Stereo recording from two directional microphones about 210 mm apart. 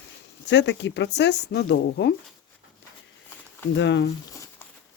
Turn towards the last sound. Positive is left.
turn(degrees=60)  # may be behind; listen again after turning